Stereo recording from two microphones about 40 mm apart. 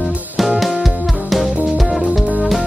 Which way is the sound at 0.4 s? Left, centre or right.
Centre.